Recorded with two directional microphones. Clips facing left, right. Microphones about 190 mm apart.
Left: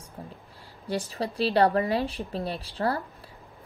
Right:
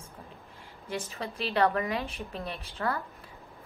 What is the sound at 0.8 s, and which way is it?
Speech, 35° left (ahead or behind).